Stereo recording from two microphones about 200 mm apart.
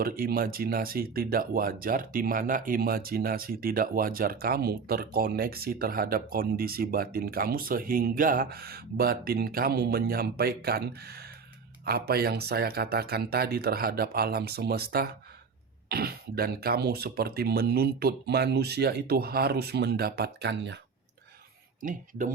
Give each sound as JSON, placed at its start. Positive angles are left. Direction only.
{"t": 0.0, "sound": "speech", "side_deg": -45}
{"t": 21.8, "sound": "speech", "side_deg": -40}